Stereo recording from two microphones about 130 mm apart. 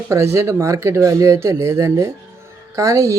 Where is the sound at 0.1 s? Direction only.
20° right (ahead or behind).